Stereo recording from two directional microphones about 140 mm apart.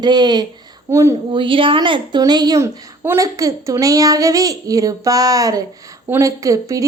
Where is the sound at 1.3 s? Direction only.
40° right (ahead or behind).